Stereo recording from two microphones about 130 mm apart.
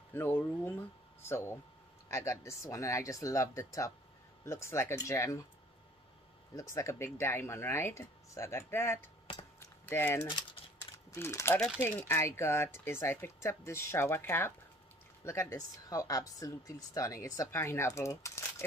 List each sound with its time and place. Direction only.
0.1 s speech: 15° left (ahead or behind)
6.5 s speech: 25° left (ahead or behind)
9.6 s typing: 15° left (ahead or behind)
11.1 s speech: 20° left (ahead or behind)